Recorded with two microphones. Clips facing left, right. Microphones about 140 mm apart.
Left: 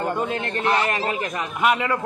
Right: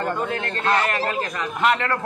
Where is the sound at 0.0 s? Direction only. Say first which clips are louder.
Left 1 dB; 20° left (ahead or behind).